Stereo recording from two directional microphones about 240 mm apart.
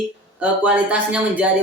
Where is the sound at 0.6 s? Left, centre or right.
Centre.